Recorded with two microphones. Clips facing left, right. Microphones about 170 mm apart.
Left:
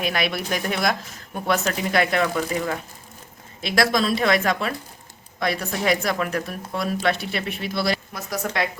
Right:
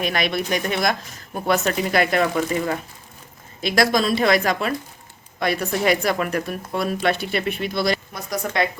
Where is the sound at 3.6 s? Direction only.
Centre (ahead or behind).